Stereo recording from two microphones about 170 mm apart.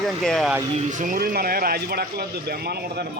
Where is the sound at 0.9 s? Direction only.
50° right (ahead or behind).